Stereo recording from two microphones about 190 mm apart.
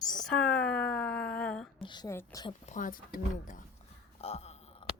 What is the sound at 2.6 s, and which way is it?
Speech, 45° left (ahead or behind).